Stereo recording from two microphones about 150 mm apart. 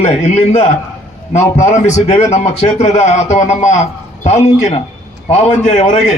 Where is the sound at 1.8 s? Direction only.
50° left (ahead or behind).